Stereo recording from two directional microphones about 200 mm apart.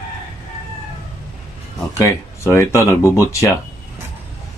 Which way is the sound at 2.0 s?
15° left (ahead or behind).